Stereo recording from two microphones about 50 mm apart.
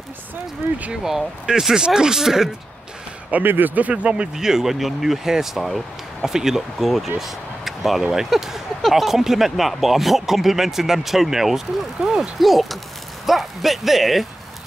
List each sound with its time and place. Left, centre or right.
1.0 s speech: centre
3.4 s speech: right
4.4 s speech: centre